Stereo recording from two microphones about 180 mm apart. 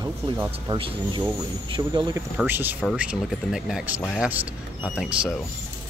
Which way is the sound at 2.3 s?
10° right (ahead or behind).